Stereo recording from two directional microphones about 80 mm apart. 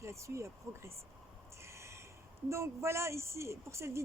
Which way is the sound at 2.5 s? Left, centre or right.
Right.